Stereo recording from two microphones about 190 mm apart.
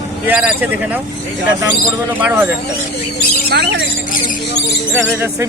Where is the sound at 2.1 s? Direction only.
10° right (ahead or behind).